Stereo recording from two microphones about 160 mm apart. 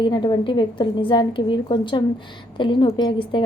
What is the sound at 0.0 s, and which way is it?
A woman's voice, 30° left (ahead or behind).